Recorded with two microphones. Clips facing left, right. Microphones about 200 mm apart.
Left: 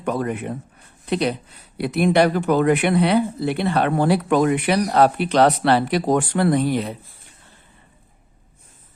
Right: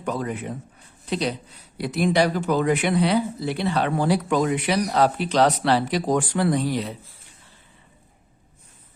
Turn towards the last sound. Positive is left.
turn(degrees=55)  # may be behind; listen again after turning